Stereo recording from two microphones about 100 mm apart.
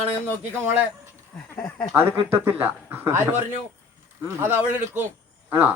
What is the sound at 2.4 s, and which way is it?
A man's voice, 20° right (ahead or behind).